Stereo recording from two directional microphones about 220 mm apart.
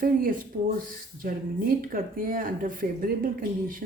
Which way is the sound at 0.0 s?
40° right (ahead or behind).